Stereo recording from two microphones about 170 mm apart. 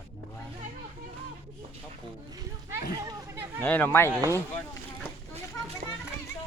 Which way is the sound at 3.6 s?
10° left (ahead or behind).